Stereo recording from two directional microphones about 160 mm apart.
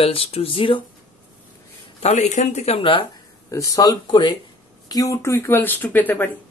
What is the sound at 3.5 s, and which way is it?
Speech, 20° left (ahead or behind).